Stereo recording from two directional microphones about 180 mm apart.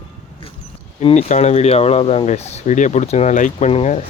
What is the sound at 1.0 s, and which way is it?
Speech, 40° left (ahead or behind).